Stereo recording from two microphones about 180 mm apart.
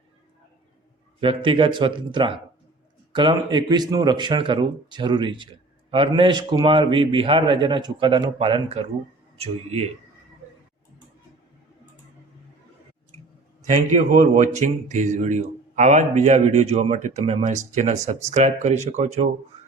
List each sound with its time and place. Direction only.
1.2 s a man's voice: 30° right (ahead or behind)
13.7 s speech: 45° right (ahead or behind)